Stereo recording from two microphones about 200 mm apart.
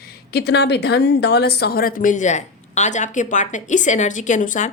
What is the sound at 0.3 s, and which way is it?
Speech, 55° left (ahead or behind).